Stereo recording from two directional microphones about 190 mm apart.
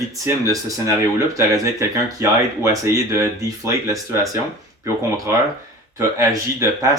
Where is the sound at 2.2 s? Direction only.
15° right (ahead or behind).